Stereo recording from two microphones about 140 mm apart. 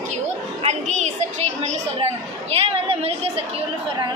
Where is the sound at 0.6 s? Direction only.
55° right (ahead or behind).